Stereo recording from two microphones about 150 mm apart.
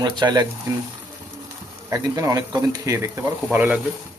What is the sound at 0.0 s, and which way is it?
Speech, 30° right (ahead or behind).